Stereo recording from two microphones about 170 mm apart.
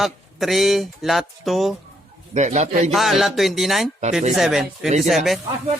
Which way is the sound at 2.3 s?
45° right (ahead or behind).